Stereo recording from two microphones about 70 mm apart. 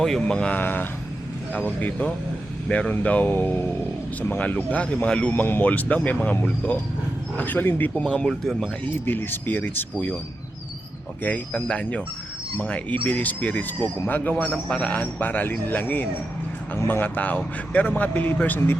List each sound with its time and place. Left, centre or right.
0.2 s speech: centre
0.5 s speech: left
2.6 s speech: centre
5.3 s speech: left
7.3 s speech: left
8.0 s speech: centre
8.3 s speech: centre
9.0 s speech: left
11.2 s speech: centre